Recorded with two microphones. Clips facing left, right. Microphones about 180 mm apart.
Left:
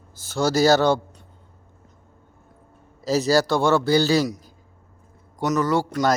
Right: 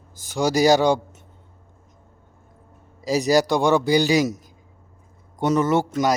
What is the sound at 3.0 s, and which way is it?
A man's voice, 15° right (ahead or behind).